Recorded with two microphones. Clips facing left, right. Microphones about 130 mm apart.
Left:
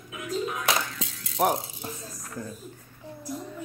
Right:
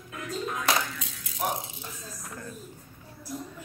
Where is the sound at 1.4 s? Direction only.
60° left (ahead or behind).